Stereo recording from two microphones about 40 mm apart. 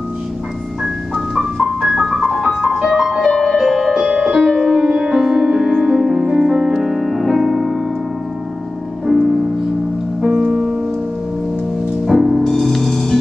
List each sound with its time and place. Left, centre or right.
1.3 s music: centre
3.8 s music: centre
4.1 s music: right
4.6 s music: centre
9.0 s music: centre
12.1 s music: centre